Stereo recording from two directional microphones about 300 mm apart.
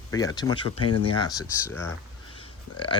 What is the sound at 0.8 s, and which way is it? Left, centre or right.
Speech, left.